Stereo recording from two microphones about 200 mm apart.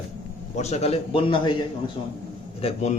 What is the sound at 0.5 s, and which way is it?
A man's voice, 35° left (ahead or behind).